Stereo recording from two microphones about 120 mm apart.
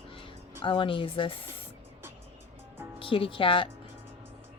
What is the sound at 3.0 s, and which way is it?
Speech, 50° left (ahead or behind).